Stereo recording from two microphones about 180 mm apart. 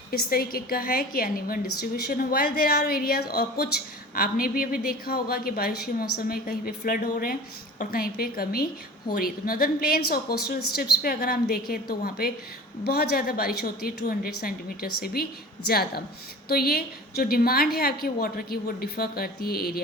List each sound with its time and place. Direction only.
0.1 s a woman's voice: 55° left (ahead or behind)